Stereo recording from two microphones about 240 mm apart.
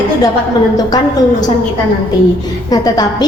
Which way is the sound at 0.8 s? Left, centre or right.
Centre.